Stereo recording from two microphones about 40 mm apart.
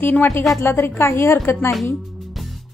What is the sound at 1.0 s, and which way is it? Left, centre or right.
Speech, left.